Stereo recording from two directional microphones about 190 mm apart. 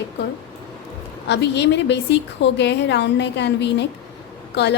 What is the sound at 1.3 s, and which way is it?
A woman's voice, 65° left (ahead or behind).